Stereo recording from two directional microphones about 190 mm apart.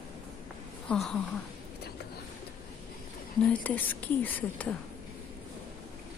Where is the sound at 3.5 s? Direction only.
10° left (ahead or behind).